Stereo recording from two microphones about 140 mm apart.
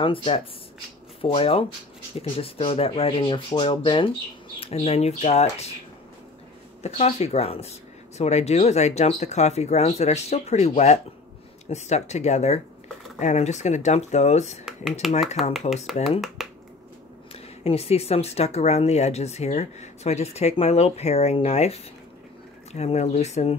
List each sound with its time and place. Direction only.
0.0 s speech: 40° left (ahead or behind)
6.8 s speech: 50° left (ahead or behind)
11.7 s speech: 55° left (ahead or behind)
14.6 s speech: centre (ahead or behind)
16.4 s finger snapping: centre (ahead or behind)
17.3 s speech: 45° left (ahead or behind)